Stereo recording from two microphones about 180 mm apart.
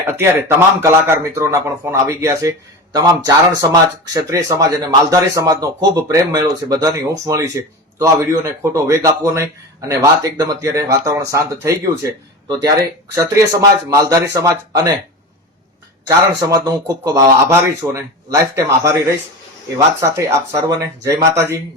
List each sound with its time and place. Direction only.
0.0 s speech: 15° right (ahead or behind)
16.0 s speech: 20° right (ahead or behind)